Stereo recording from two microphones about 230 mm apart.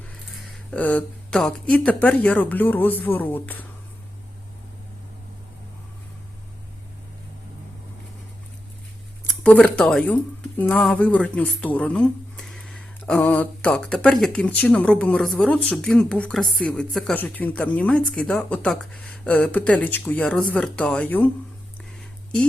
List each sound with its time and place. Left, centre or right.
0.7 s speech: centre
9.2 s speech: centre